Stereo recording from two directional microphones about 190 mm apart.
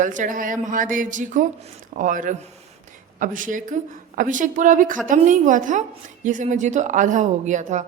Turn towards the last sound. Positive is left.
turn(degrees=-40)  # may be behind; listen again after turning